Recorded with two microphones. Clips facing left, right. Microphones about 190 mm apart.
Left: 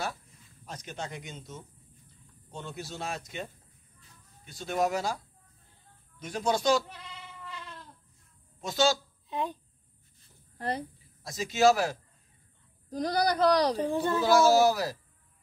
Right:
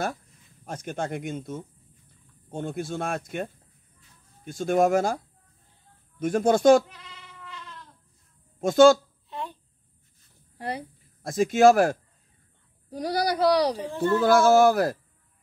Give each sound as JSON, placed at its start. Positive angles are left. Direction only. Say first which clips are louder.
{"t": 0.7, "sound": "speech", "louder": "right 8 dB", "side_deg": -50}
{"t": 4.5, "sound": "speech", "louder": "right 8 dB", "side_deg": -50}
{"t": 8.5, "sound": "speech", "louder": "right 11 dB", "side_deg": -50}
{"t": 9.3, "sound": "a child's voice", "louder": "left 3 dB", "side_deg": 15}
{"t": 10.6, "sound": "speech", "louder": "even", "side_deg": -10}
{"t": 11.2, "sound": "speech", "louder": "right 6 dB", "side_deg": -55}
{"t": 12.9, "sound": "speech", "louder": "right 1 dB", "side_deg": -10}
{"t": 13.8, "sound": "speech", "louder": "right 2 dB", "side_deg": 15}
{"t": 14.1, "sound": "speech", "louder": "right 4 dB", "side_deg": -55}